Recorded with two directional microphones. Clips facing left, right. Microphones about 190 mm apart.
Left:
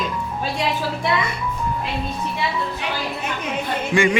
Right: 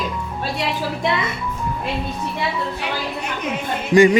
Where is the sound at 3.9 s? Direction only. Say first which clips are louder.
Right 7 dB; 40° right (ahead or behind).